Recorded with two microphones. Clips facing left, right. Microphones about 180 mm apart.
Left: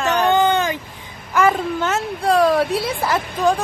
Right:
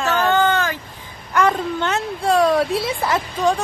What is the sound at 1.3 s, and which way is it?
Speech, 5° left (ahead or behind).